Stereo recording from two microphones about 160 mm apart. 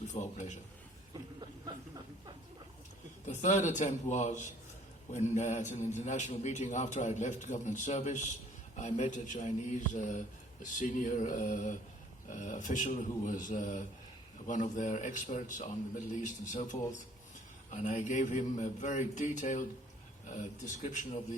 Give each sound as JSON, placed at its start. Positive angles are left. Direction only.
{"t": 0.1, "sound": "a man's voice", "side_deg": 50}
{"t": 1.1, "sound": "a sound", "side_deg": -30}
{"t": 3.2, "sound": "a man's voice", "side_deg": 50}
{"t": 20.8, "sound": "a man's voice", "side_deg": 50}